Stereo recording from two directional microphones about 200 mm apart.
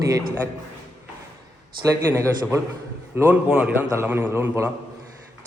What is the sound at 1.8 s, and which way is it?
A man's voice, 15° right (ahead or behind).